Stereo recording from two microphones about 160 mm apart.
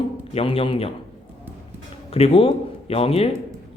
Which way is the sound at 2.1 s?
40° left (ahead or behind).